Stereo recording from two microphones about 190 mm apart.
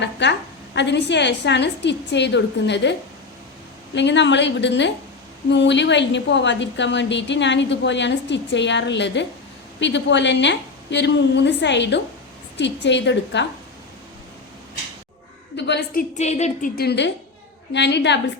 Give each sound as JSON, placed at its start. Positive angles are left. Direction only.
{"t": 0.0, "sound": "a woman's voice", "side_deg": 65}
{"t": 3.9, "sound": "a woman's voice", "side_deg": 70}
{"t": 15.5, "sound": "a woman's voice", "side_deg": 60}